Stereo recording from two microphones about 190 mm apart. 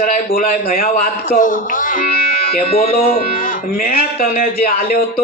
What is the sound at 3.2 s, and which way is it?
A man's voice, 45° left (ahead or behind).